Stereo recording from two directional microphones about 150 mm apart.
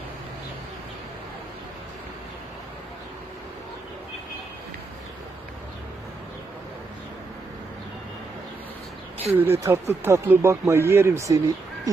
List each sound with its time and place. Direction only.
9.4 s speech: 15° right (ahead or behind)